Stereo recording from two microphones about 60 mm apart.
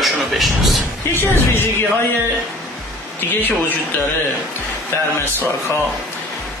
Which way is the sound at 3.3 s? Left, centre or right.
Left.